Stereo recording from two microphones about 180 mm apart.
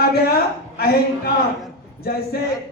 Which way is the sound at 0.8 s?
60° left (ahead or behind).